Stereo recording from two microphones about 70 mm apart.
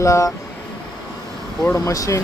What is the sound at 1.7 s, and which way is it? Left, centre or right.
Speech, left.